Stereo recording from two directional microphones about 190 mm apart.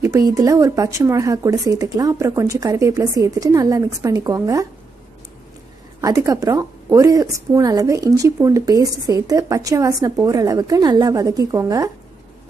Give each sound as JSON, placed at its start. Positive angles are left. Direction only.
{"t": 0.0, "sound": "speech", "side_deg": -15}
{"t": 5.9, "sound": "a woman's voice", "side_deg": -20}